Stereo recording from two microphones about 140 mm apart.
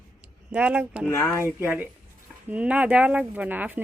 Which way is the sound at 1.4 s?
15° right (ahead or behind).